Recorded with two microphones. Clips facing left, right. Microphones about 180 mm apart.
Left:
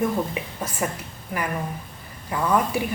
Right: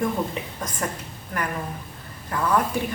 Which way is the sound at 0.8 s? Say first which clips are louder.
Left 2 dB; 10° left (ahead or behind).